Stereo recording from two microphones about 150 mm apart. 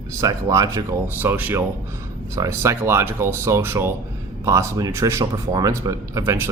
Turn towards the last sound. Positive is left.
turn(degrees=-20)  # may be behind; listen again after turning